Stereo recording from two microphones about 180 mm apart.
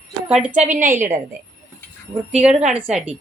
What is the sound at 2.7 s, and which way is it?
Speech, 10° right (ahead or behind).